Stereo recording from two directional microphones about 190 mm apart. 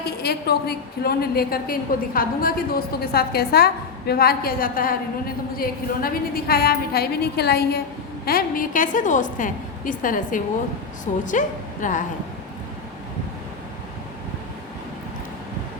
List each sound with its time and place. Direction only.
0.0 s a woman's voice: 55° left (ahead or behind)